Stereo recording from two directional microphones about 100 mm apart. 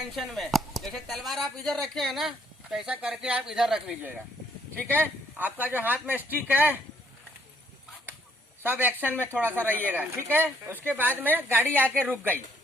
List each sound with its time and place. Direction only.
0.0 s speech: centre (ahead or behind)
5.4 s speech: 15° right (ahead or behind)
8.6 s speech: 20° right (ahead or behind)
9.1 s speech: 20° left (ahead or behind)
9.6 s a woman's voice: 20° right (ahead or behind)